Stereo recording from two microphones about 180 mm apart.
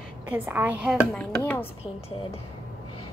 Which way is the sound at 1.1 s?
5° left (ahead or behind).